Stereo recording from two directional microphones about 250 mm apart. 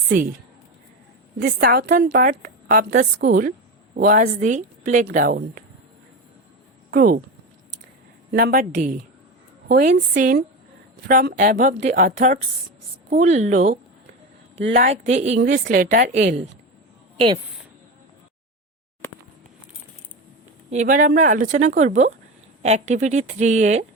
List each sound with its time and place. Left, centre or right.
0.1 s a woman's voice: right
1.4 s a woman's voice: right
6.9 s a woman's voice: right
8.3 s a woman's voice: right
14.8 s a woman's voice: right
20.7 s a woman's voice: right